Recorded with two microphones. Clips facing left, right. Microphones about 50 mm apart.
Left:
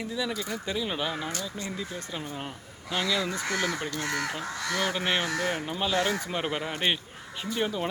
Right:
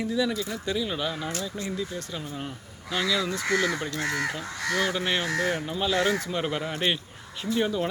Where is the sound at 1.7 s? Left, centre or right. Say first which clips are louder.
Right 3 dB; centre.